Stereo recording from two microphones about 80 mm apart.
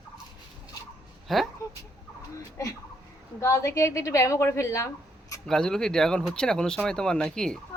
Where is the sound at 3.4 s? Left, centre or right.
Left.